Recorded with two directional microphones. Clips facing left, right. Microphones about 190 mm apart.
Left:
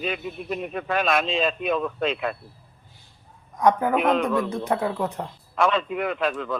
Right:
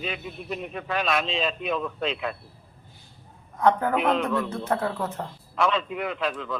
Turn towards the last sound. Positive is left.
turn(degrees=50)  # may be behind; listen again after turning